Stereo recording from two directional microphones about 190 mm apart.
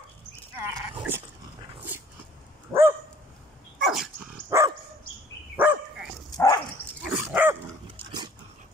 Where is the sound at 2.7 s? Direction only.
Centre (ahead or behind).